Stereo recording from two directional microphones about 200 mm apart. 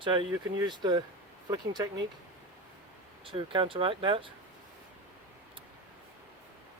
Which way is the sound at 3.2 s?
25° right (ahead or behind).